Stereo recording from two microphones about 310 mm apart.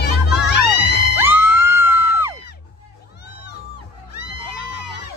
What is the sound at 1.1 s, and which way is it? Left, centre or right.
Music, centre.